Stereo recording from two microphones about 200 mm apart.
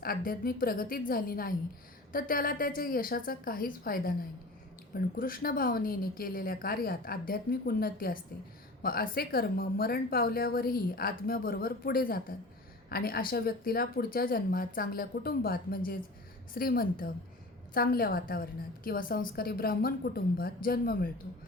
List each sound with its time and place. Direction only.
0.0 s a woman's voice: 45° left (ahead or behind)